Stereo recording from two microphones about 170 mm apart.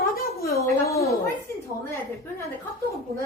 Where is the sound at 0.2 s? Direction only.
65° left (ahead or behind).